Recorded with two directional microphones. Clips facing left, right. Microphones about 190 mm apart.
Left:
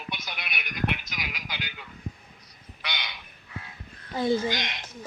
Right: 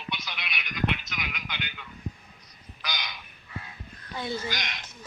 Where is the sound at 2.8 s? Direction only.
30° left (ahead or behind).